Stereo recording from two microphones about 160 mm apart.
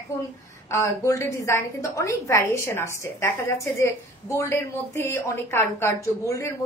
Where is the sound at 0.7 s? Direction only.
20° left (ahead or behind).